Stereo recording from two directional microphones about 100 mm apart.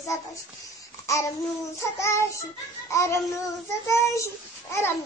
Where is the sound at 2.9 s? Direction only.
30° left (ahead or behind).